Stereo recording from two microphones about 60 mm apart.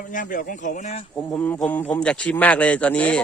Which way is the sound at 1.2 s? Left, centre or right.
Centre.